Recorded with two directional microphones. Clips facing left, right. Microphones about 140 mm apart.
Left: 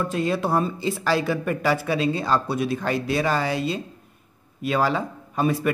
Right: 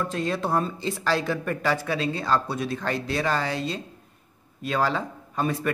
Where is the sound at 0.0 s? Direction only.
5° left (ahead or behind).